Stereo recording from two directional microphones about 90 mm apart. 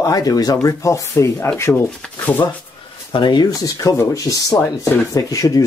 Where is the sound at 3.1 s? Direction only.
65° left (ahead or behind).